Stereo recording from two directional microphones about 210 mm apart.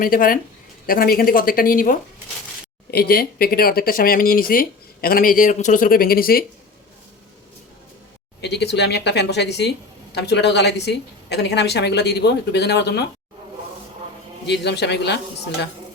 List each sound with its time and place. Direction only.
0.0 s speech: 40° left (ahead or behind)
8.4 s speech: 55° left (ahead or behind)
14.4 s speech: 55° left (ahead or behind)